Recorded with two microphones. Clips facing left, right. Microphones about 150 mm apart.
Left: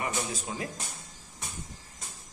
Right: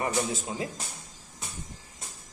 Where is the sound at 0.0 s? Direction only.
25° right (ahead or behind).